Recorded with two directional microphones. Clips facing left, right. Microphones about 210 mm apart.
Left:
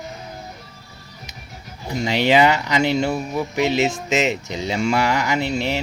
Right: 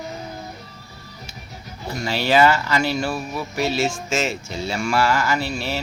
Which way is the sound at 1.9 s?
20° left (ahead or behind).